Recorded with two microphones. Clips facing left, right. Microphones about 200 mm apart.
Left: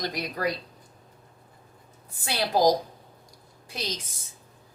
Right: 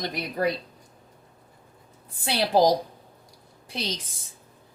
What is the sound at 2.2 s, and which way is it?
Speech, 30° right (ahead or behind).